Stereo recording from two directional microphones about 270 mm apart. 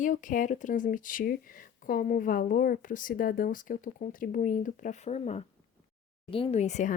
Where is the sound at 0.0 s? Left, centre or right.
Left.